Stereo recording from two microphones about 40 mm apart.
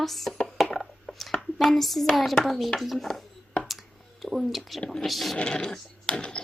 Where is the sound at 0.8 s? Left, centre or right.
Centre.